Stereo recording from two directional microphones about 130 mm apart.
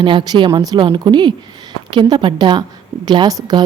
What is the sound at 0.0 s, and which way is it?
A woman's voice, 40° right (ahead or behind).